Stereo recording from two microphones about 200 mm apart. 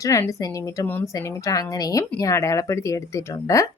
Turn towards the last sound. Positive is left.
turn(degrees=15)  # may be behind; listen again after turning